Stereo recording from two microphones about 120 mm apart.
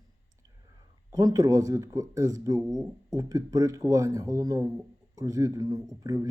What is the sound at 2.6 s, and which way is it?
Speech, 5° right (ahead or behind).